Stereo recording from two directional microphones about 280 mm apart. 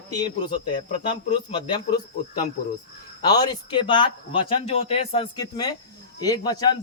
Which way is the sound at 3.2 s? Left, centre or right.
Centre.